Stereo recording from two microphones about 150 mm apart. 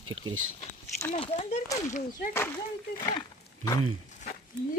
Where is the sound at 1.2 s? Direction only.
40° left (ahead or behind).